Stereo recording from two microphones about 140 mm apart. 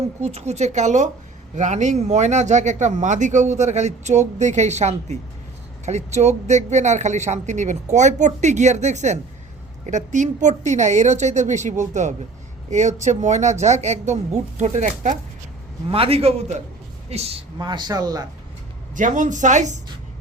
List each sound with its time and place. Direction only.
0.2 s speech: 50° right (ahead or behind)
15.9 s a woman's voice: 45° right (ahead or behind)
17.7 s speech: 30° right (ahead or behind)
18.9 s speech: 65° right (ahead or behind)